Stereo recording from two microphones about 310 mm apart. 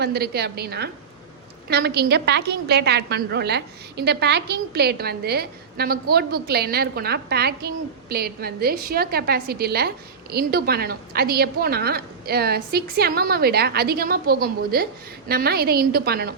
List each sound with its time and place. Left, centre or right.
0.0 s a woman's voice: right